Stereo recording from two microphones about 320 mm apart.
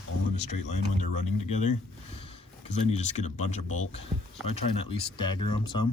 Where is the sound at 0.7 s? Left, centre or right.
Left.